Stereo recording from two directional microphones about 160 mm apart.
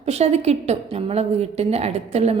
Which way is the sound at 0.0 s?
40° right (ahead or behind).